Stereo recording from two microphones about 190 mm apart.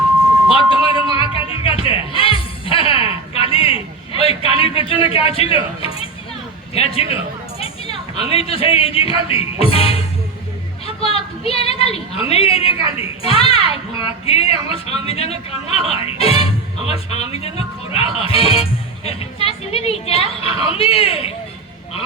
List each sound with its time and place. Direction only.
1.1 s music: 30° left (ahead or behind)
4.2 s a man's voice: 30° left (ahead or behind)
10.8 s a sound: 30° left (ahead or behind)
12.3 s a woman's voice: 30° left (ahead or behind)